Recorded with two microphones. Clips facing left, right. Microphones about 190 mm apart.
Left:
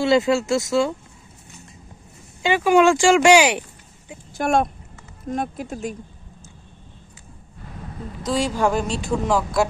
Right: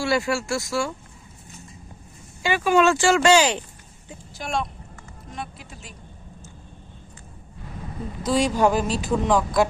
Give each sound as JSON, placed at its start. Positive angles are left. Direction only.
{"t": 0.0, "sound": "speech", "side_deg": 20}
{"t": 2.4, "sound": "speech", "side_deg": 15}
{"t": 4.4, "sound": "speech", "side_deg": 50}
{"t": 8.3, "sound": "speech", "side_deg": -5}